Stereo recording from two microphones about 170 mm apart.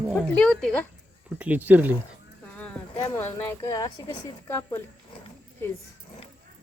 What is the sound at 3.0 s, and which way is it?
Speech, 15° left (ahead or behind).